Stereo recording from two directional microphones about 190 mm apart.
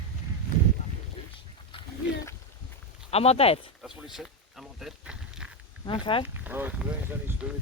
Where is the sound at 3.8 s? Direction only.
Centre (ahead or behind).